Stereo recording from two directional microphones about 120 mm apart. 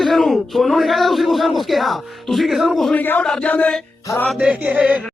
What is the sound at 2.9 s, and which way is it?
Chant, 15° left (ahead or behind).